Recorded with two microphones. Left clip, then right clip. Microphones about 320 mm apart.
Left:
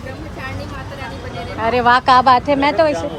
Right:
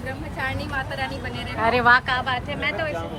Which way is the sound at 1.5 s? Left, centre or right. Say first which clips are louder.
Left 4 dB; centre.